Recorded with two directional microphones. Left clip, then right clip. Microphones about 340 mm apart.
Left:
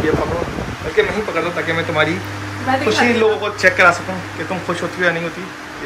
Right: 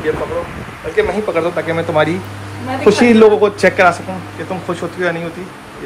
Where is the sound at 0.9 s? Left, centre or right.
Centre.